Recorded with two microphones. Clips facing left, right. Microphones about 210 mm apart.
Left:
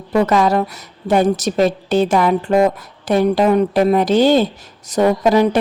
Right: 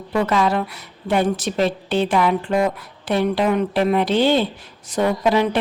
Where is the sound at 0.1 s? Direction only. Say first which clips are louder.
Left 5 dB; 40° left (ahead or behind).